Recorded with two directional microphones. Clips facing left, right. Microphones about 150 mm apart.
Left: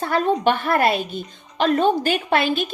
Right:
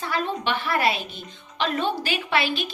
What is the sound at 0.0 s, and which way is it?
A woman's voice, 45° left (ahead or behind).